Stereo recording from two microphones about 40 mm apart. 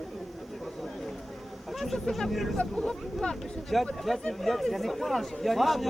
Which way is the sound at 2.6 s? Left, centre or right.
Left.